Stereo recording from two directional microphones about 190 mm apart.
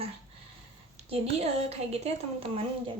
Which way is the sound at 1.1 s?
35° right (ahead or behind).